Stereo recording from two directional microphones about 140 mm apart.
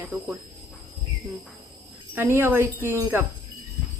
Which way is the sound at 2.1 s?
15° right (ahead or behind).